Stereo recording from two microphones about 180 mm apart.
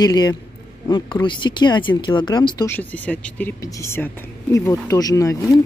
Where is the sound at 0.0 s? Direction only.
20° left (ahead or behind).